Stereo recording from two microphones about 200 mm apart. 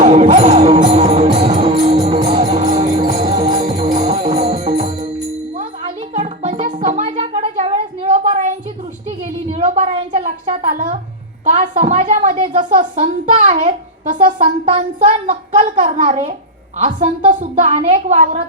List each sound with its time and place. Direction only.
0.0 s music: 35° right (ahead or behind)
6.2 s music: 35° right (ahead or behind)
9.2 s a sound: 35° right (ahead or behind)
16.7 s a woman's voice: 35° right (ahead or behind)